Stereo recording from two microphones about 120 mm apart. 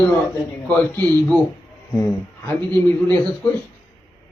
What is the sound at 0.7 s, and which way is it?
Speech, 10° left (ahead or behind).